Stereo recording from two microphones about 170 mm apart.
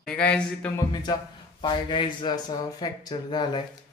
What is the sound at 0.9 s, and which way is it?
Speech, 20° left (ahead or behind).